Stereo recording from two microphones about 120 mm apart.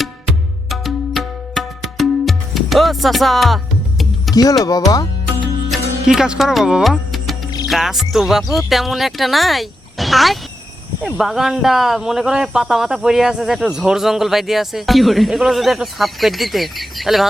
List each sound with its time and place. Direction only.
0.7 s music: centre (ahead or behind)
4.4 s speech: 30° left (ahead or behind)
4.9 s music: 35° left (ahead or behind)
5.7 s music: 5° right (ahead or behind)
7.7 s speech: centre (ahead or behind)